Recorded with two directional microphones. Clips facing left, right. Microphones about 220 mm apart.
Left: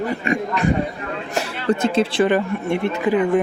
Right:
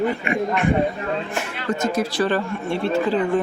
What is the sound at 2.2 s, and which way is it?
Speech, 20° left (ahead or behind).